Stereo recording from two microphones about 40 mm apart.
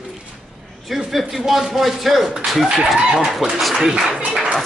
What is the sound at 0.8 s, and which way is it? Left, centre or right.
Speech, centre.